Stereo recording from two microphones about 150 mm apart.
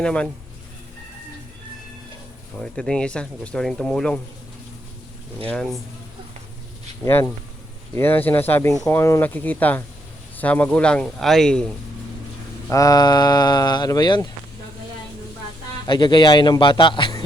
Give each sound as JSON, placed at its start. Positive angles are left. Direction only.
{"t": 0.0, "sound": "speech", "side_deg": 5}
{"t": 2.6, "sound": "speech", "side_deg": 5}
{"t": 5.4, "sound": "speech", "side_deg": 10}
{"t": 7.0, "sound": "speech", "side_deg": 15}
{"t": 12.7, "sound": "speech", "side_deg": 25}
{"t": 15.9, "sound": "speech", "side_deg": 30}